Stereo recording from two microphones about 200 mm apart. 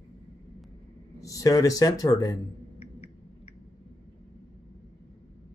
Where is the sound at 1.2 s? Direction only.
15° left (ahead or behind).